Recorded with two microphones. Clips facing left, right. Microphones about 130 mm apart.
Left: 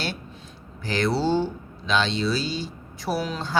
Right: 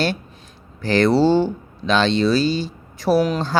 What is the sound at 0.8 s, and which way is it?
Speech, 85° right.